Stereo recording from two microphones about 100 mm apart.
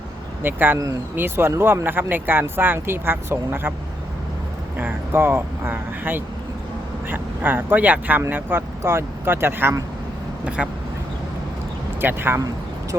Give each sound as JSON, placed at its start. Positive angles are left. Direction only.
{"t": 0.4, "sound": "speech", "side_deg": -20}
{"t": 4.8, "sound": "speech", "side_deg": -20}
{"t": 10.6, "sound": "speech", "side_deg": -5}
{"t": 11.9, "sound": "speech", "side_deg": -20}